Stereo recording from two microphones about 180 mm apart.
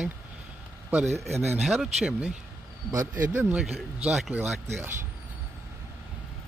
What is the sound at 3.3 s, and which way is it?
Speech, 5° right (ahead or behind).